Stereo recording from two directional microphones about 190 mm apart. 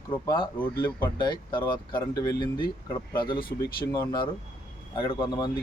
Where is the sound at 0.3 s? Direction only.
25° left (ahead or behind).